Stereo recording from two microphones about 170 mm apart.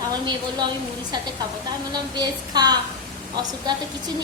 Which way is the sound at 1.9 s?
25° right (ahead or behind).